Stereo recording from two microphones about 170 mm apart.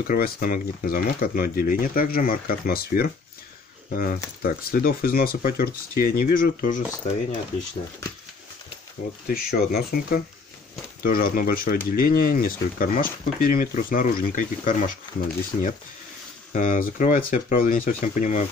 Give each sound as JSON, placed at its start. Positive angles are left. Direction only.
{"t": 0.0, "sound": "speech", "side_deg": 60}
{"t": 9.3, "sound": "speech", "side_deg": 60}